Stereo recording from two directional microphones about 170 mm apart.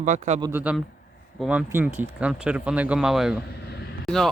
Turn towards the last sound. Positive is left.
turn(degrees=0)  # may be behind; listen again after turning